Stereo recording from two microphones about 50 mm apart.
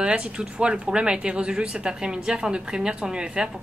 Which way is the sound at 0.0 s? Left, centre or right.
Right.